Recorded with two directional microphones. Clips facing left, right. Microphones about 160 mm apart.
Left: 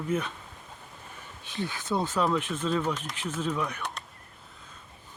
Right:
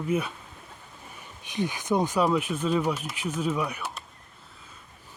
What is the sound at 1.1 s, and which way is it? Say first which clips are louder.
Speech: right 4 dB; 15° right (ahead or behind).